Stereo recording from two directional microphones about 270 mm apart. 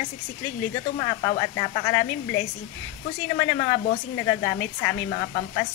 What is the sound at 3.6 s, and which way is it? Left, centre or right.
Speech, centre.